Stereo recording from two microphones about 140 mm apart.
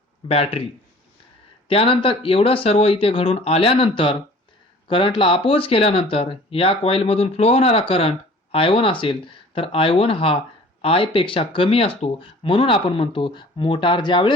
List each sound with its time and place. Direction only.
0.3 s speech: 45° left (ahead or behind)